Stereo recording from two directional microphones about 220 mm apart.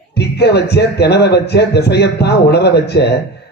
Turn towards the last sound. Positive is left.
turn(degrees=50)  # may be behind; listen again after turning